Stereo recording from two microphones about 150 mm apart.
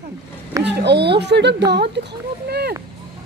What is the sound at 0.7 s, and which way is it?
Speech, 90° right.